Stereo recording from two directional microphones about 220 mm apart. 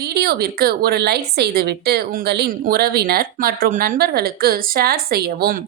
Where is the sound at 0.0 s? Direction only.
45° right (ahead or behind).